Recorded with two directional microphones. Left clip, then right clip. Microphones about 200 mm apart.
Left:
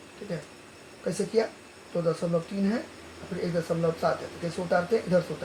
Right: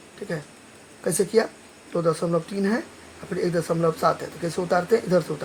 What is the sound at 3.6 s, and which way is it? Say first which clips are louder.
Speech: right 5 dB; 50° right (ahead or behind).